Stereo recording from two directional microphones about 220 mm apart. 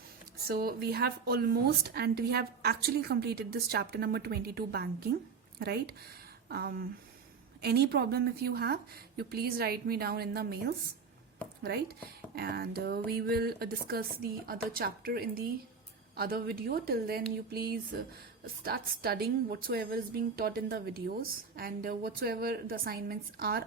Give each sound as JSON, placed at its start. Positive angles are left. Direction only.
{"t": 0.4, "sound": "a woman's voice", "side_deg": -45}